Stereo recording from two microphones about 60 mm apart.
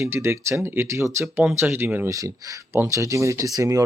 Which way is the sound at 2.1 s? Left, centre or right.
Right.